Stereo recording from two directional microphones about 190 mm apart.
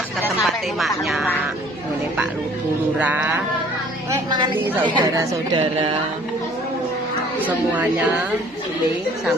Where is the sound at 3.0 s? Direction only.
10° right (ahead or behind).